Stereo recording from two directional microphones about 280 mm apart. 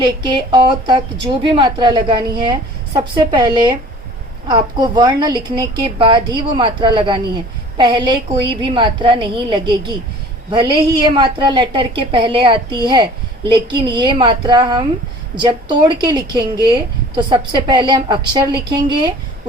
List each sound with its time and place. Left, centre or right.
0.0 s a woman's voice: centre